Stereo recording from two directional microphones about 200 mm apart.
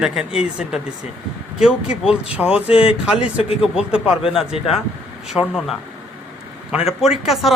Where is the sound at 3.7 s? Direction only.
5° right (ahead or behind).